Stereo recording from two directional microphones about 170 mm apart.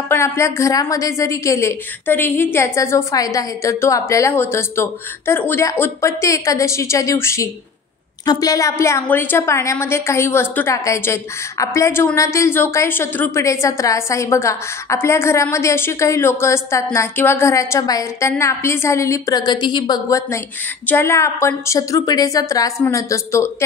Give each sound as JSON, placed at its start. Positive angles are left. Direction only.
{"t": 0.1, "sound": "a woman's voice", "side_deg": 15}